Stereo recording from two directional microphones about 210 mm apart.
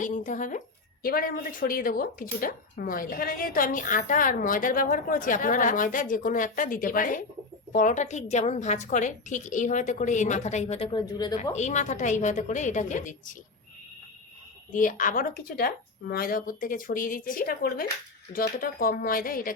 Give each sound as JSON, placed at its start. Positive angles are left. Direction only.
{"t": 0.0, "sound": "speech", "side_deg": 35}
{"t": 11.0, "sound": "speech", "side_deg": 20}
{"t": 11.5, "sound": "speech", "side_deg": 35}
{"t": 14.7, "sound": "speech", "side_deg": 40}